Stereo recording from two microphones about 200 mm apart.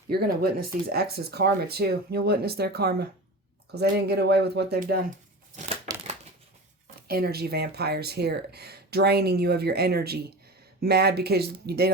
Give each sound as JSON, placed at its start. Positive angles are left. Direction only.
{"t": 0.1, "sound": "speech", "side_deg": -50}
{"t": 5.9, "sound": "crumpling", "side_deg": -20}
{"t": 7.1, "sound": "speech", "side_deg": -50}